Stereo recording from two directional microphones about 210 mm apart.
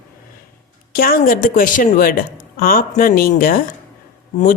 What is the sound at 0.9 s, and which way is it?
A woman's voice, 45° left (ahead or behind).